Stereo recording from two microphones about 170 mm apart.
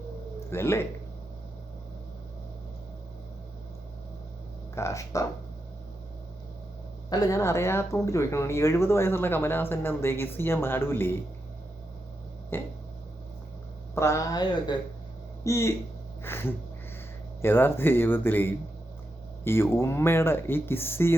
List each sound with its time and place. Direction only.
0.5 s speech: 15° left (ahead or behind)
4.7 s speech: 20° left (ahead or behind)
7.1 s speech: 20° left (ahead or behind)
12.5 s speech: 15° left (ahead or behind)
13.9 s speech: 15° left (ahead or behind)